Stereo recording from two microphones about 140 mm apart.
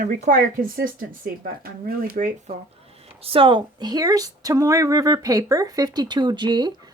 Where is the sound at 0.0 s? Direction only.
75° right (ahead or behind).